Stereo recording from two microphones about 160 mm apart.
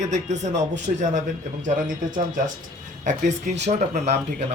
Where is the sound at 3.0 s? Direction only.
50° right (ahead or behind).